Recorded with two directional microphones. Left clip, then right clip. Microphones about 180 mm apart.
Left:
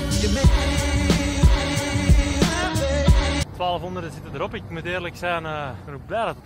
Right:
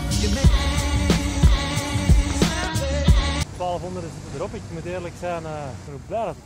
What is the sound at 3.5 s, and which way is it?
Speech, 10° left (ahead or behind).